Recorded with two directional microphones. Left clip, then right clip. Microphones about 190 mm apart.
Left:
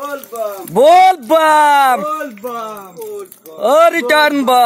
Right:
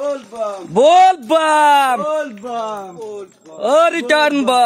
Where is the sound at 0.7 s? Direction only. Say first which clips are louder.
Left 2 dB; 15° left (ahead or behind).